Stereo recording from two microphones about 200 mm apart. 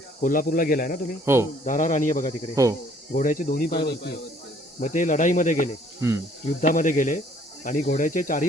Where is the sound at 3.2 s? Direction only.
40° left (ahead or behind).